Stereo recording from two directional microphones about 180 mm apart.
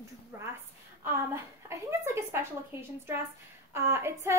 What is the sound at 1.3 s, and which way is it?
A woman's voice, 15° right (ahead or behind).